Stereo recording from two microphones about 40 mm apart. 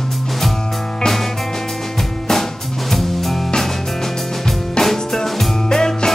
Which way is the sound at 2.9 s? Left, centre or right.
Centre.